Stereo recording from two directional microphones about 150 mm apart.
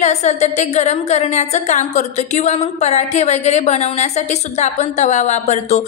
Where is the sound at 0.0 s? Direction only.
50° left (ahead or behind).